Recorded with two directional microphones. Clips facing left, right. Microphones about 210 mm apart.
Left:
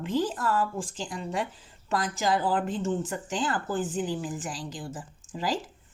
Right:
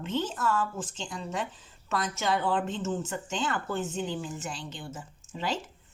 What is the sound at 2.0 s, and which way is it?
A woman's voice, 30° left (ahead or behind).